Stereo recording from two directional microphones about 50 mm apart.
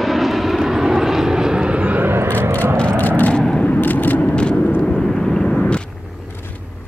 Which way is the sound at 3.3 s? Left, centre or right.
Centre.